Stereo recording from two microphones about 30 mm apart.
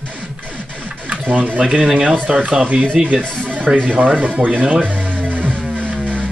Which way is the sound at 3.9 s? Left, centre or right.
Right.